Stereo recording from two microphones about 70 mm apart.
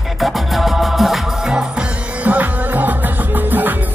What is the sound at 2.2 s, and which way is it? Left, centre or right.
Music, right.